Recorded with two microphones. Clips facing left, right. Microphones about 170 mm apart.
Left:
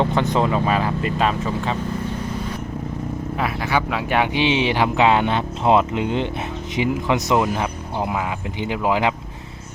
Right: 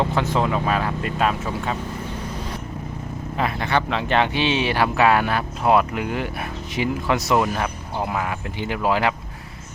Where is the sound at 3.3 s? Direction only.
5° left (ahead or behind).